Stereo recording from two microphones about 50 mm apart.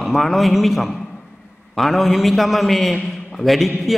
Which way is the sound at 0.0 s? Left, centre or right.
Centre.